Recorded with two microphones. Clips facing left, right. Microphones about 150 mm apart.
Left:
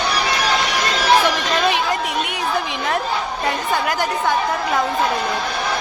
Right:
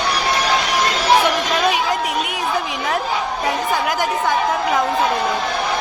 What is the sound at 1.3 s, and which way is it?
Chatter, centre (ahead or behind).